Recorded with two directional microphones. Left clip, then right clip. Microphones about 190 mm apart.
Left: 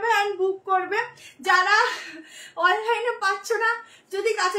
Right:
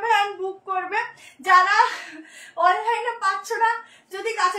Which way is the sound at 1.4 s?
15° left (ahead or behind).